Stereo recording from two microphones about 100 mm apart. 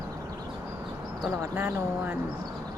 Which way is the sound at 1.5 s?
20° right (ahead or behind).